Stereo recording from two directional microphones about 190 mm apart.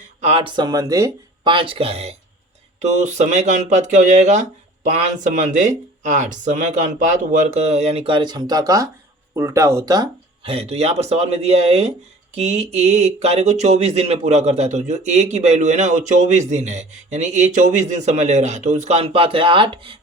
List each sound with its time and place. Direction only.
0.2 s speech: 30° right (ahead or behind)